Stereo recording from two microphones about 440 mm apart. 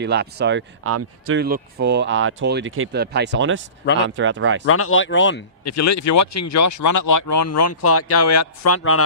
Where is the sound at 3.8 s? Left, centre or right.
Left.